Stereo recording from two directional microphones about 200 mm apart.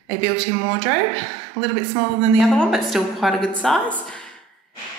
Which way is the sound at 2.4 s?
Centre (ahead or behind).